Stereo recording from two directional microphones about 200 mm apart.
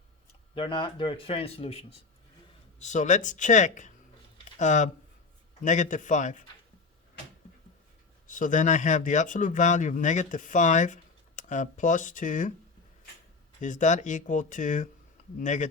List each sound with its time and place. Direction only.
0.5 s a man's voice: 25° left (ahead or behind)
8.3 s speech: 40° left (ahead or behind)
13.6 s speech: 40° left (ahead or behind)